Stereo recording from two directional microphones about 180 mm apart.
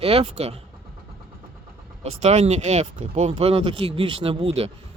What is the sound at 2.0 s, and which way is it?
Speech, 35° right (ahead or behind).